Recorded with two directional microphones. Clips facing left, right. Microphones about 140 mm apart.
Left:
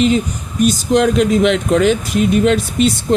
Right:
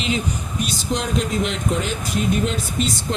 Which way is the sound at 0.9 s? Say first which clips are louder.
Left 9 dB; 75° left (ahead or behind).